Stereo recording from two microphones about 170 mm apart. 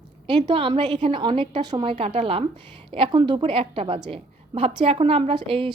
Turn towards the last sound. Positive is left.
turn(degrees=-30)  # may be behind; listen again after turning